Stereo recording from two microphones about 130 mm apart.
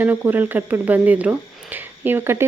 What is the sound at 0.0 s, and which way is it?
Speech, 15° right (ahead or behind).